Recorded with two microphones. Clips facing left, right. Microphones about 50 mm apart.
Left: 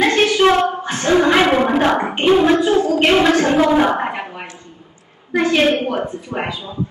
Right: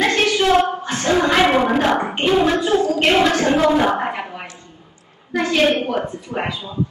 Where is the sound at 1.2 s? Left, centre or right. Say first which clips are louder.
Left 1 dB; centre.